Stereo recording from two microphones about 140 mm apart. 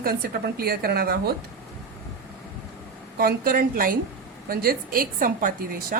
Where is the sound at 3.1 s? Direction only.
90° right.